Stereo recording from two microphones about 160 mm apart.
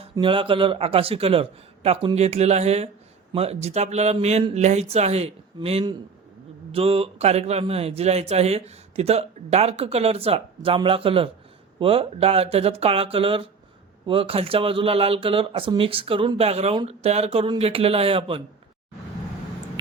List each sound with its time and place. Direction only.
0.0 s speech: 30° right (ahead or behind)